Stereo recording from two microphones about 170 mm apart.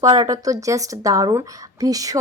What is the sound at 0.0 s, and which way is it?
Speech, 20° right (ahead or behind).